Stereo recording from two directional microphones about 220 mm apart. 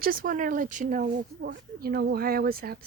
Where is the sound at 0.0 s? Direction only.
40° right (ahead or behind).